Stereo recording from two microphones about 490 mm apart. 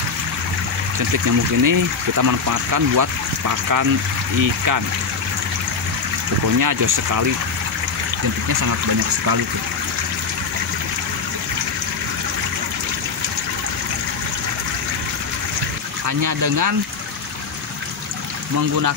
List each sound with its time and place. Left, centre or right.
0.9 s speech: right
6.6 s speech: right
16.1 s speech: right
18.6 s speech: right